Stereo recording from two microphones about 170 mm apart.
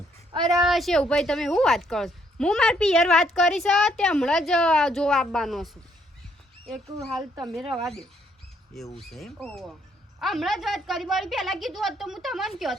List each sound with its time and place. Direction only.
0.3 s a child's voice: 25° right (ahead or behind)
0.6 s a woman's voice: centre (ahead or behind)